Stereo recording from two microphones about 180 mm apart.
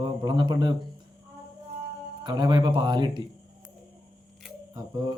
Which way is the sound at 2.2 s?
25° right (ahead or behind).